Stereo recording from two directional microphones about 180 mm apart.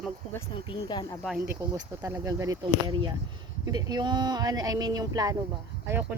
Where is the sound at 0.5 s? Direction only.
30° left (ahead or behind).